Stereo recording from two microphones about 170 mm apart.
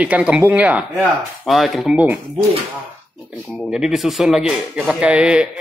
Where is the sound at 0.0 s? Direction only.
10° right (ahead or behind).